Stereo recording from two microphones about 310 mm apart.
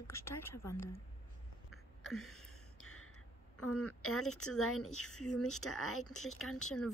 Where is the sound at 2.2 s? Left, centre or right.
Left.